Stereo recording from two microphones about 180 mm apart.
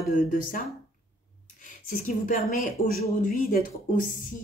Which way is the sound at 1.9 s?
45° left (ahead or behind).